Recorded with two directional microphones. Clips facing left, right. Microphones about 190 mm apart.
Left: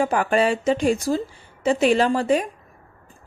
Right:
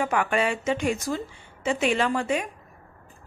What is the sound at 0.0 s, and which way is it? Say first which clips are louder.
A woman's voice: left 5 dB; 35° left (ahead or behind).